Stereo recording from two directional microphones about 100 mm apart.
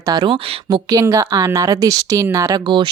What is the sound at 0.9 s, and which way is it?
Speech, 35° right (ahead or behind).